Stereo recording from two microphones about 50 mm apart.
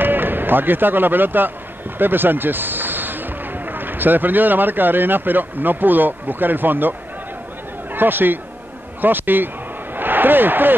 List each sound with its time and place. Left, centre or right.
0.0 s a man's voice: right